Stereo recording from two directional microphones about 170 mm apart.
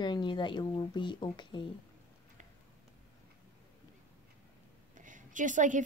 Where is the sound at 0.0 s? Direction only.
25° left (ahead or behind).